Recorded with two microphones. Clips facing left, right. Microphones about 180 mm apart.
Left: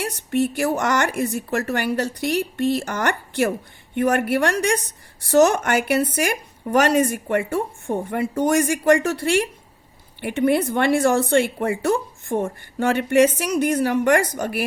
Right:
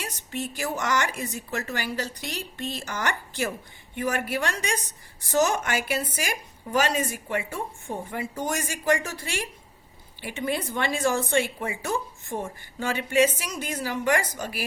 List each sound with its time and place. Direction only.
0.0 s a woman's voice: 60° left (ahead or behind)